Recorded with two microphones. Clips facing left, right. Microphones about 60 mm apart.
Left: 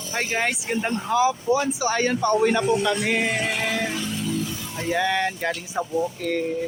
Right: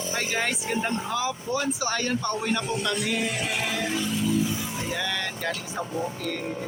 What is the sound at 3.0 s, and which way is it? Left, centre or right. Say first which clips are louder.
Speech: left 5 dB; left.